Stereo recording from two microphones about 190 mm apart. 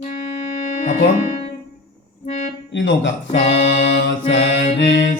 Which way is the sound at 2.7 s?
75° left (ahead or behind).